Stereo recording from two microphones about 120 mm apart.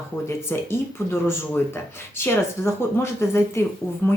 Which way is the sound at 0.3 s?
20° left (ahead or behind).